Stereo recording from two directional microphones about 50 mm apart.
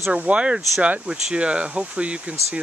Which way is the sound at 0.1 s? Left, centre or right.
Right.